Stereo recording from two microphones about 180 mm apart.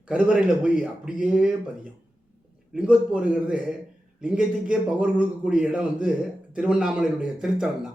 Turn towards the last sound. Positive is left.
turn(degrees=-5)  # may be behind; listen again after turning